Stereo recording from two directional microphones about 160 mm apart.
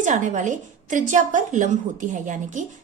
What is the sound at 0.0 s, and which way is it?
A woman's voice, 50° right (ahead or behind).